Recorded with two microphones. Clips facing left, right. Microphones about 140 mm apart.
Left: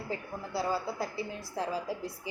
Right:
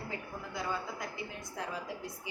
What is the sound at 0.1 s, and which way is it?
A woman's voice, 35° left (ahead or behind).